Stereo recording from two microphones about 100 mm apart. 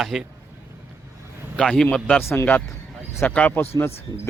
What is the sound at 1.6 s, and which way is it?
A man's voice, 5° left (ahead or behind).